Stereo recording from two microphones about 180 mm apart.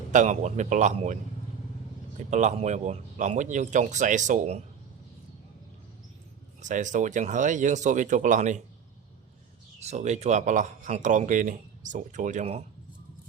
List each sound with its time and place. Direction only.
0.1 s a man's voice: 40° right (ahead or behind)
6.6 s speech: 45° right (ahead or behind)
9.8 s speech: 40° right (ahead or behind)